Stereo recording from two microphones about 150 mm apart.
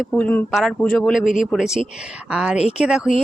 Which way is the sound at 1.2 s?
60° left (ahead or behind).